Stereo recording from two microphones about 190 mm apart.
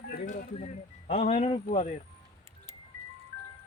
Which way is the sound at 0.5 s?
35° left (ahead or behind).